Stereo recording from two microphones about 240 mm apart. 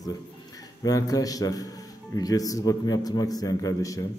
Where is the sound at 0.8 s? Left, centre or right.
Centre.